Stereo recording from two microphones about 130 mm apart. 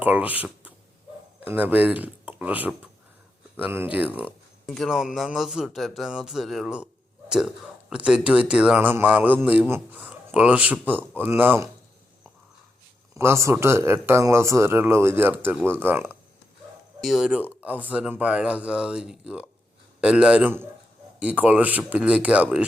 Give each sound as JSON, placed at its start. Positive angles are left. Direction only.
{"t": 0.0, "sound": "speech", "side_deg": -15}
{"t": 4.6, "sound": "speech", "side_deg": 0}
{"t": 13.1, "sound": "speech", "side_deg": -20}
{"t": 17.0, "sound": "speech", "side_deg": -5}